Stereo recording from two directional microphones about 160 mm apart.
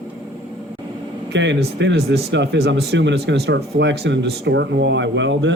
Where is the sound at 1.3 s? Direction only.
90° right.